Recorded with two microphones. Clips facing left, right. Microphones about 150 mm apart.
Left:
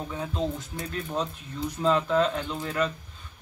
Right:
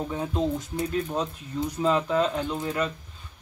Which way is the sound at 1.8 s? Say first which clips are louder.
Left 1 dB; 5° right (ahead or behind).